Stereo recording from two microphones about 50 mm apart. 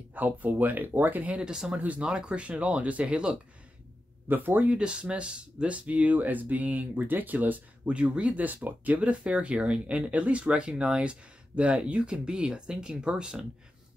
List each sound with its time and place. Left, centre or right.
0.1 s speech: right
1.3 s speech: centre
4.3 s speech: right
4.7 s speech: right
7.8 s speech: right
9.2 s speech: right